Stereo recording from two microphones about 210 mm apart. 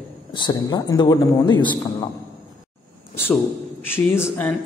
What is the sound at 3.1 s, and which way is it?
A man's voice, 10° left (ahead or behind).